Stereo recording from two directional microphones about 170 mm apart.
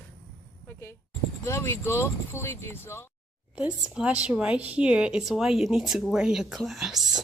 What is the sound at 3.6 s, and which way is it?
A woman's voice, 5° right (ahead or behind).